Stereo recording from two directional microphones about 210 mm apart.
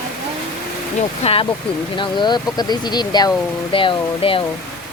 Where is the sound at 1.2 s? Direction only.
30° left (ahead or behind).